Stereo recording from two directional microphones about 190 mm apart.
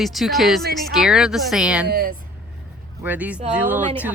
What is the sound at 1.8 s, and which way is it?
Speech, 55° right (ahead or behind).